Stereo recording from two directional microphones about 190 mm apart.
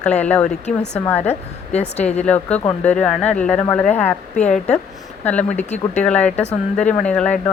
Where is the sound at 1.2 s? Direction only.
35° left (ahead or behind).